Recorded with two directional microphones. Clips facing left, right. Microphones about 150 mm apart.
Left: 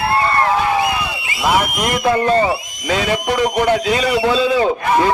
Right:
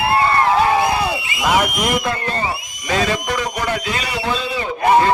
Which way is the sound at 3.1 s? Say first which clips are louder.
Left 4 dB; 25° left (ahead or behind).